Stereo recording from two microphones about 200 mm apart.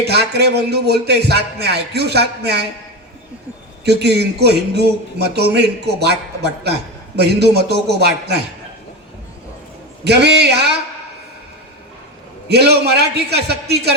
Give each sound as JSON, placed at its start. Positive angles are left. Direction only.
{"t": 0.0, "sound": "a man's voice", "side_deg": -55}
{"t": 3.8, "sound": "a man's voice", "side_deg": -55}
{"t": 10.0, "sound": "a man's voice", "side_deg": -55}
{"t": 12.5, "sound": "a man's voice", "side_deg": -55}